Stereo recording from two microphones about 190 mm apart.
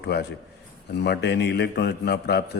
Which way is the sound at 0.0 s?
55° left (ahead or behind).